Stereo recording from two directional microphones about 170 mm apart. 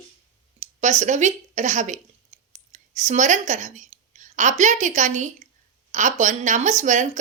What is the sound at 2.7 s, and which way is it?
A woman's voice, 45° right (ahead or behind).